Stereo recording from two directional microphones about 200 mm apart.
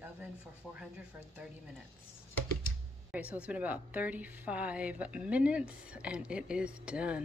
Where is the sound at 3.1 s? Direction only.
5° right (ahead or behind).